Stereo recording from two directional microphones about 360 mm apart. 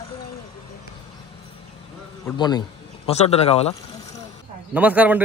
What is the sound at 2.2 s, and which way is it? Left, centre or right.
A man's voice, centre.